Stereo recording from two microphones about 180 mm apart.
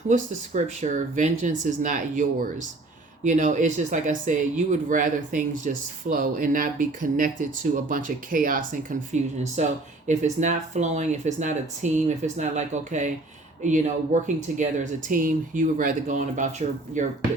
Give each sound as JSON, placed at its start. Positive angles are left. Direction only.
{"t": 0.1, "sound": "speech", "side_deg": -45}